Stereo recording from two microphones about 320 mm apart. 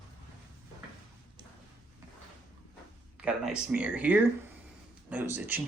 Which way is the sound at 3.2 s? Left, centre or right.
Centre.